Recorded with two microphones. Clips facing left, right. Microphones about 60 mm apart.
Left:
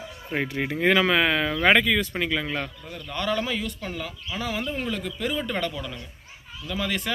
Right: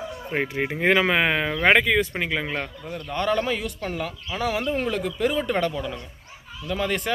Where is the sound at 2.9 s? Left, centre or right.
Right.